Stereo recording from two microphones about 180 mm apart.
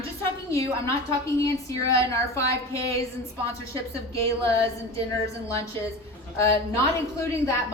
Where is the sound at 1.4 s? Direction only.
15° left (ahead or behind).